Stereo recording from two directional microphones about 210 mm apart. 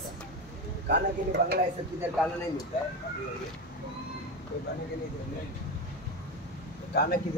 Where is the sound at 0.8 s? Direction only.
50° right (ahead or behind).